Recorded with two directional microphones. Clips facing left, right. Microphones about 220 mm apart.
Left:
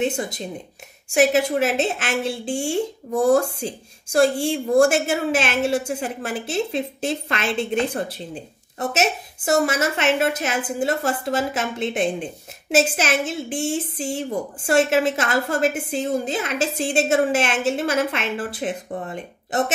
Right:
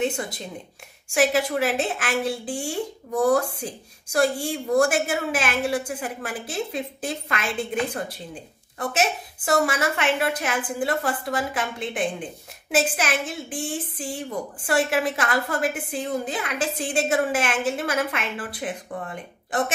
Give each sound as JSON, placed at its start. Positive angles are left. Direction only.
{"t": 0.0, "sound": "a woman's voice", "side_deg": 20}